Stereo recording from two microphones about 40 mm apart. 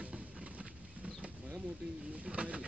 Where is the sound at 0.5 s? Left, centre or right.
Right.